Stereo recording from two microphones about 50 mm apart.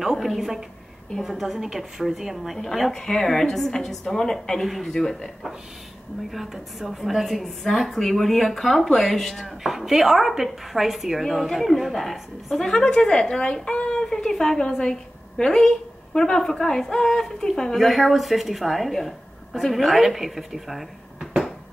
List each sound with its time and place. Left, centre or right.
0.0 s a woman's voice: centre
6.3 s a woman's voice: centre; by 14.0 s left
14.0 s a woman's voice: centre